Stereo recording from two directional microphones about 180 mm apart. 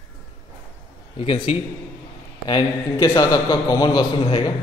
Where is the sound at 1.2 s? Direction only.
35° left (ahead or behind).